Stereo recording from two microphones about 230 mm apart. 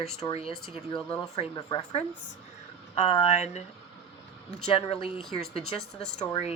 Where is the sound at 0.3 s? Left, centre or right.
Left.